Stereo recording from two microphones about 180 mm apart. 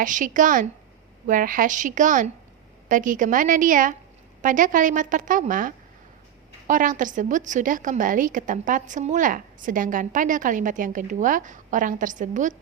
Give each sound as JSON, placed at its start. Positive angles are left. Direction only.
{"t": 0.0, "sound": "a woman's voice", "side_deg": -45}